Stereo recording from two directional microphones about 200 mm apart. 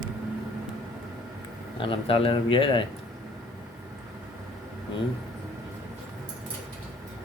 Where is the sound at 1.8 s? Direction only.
25° left (ahead or behind).